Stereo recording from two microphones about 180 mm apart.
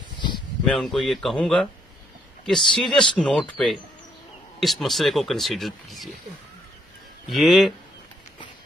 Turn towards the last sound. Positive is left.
turn(degrees=0)  # may be behind; listen again after turning